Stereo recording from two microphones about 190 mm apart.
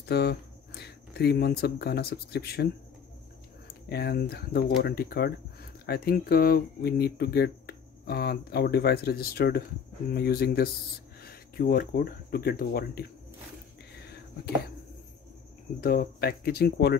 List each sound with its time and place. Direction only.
0.1 s speech: 60° left (ahead or behind)
15.8 s speech: 50° left (ahead or behind)